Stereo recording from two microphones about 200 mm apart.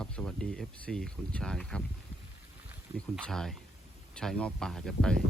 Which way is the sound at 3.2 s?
Centre (ahead or behind).